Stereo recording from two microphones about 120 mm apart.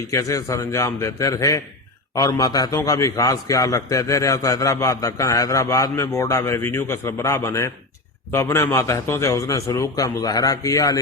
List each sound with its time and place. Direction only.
0.1 s a man's voice: 25° left (ahead or behind)